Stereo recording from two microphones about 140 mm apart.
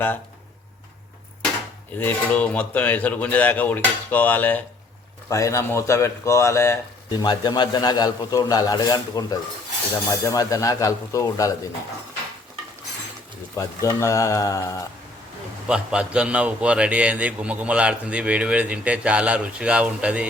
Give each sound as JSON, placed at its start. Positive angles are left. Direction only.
{"t": 2.0, "sound": "a man's voice", "side_deg": 10}
{"t": 13.6, "sound": "a man's voice", "side_deg": 25}
{"t": 15.6, "sound": "a man's voice", "side_deg": -5}